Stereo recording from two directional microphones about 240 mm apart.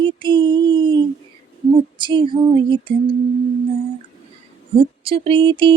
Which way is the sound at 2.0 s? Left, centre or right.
Centre.